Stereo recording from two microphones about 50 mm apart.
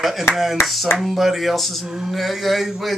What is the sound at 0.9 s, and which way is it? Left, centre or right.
Speech, centre.